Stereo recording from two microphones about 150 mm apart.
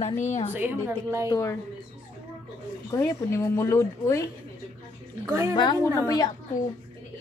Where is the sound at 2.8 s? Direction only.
20° left (ahead or behind).